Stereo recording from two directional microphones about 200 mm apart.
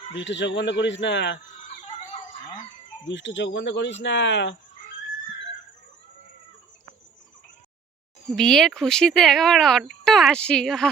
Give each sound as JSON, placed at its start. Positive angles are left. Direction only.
{"t": 0.1, "sound": "speech", "side_deg": 65}
{"t": 3.0, "sound": "speech", "side_deg": 65}
{"t": 8.4, "sound": "speech", "side_deg": 0}